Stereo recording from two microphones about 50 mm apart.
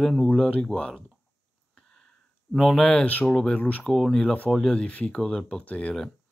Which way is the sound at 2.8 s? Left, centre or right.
Centre.